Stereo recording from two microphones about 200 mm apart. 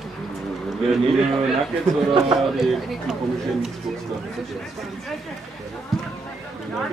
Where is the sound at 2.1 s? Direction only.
Centre (ahead or behind).